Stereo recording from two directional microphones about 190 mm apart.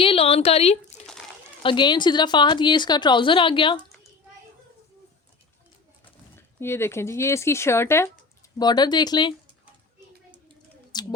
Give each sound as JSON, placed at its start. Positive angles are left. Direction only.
{"t": 0.0, "sound": "a woman's voice", "side_deg": 30}
{"t": 6.3, "sound": "a woman's voice", "side_deg": 10}
{"t": 10.9, "sound": "speech", "side_deg": 20}